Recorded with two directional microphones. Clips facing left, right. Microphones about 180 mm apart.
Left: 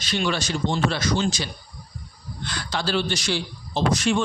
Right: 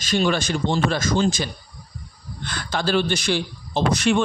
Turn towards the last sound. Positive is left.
turn(degrees=-60)  # may be behind; listen again after turning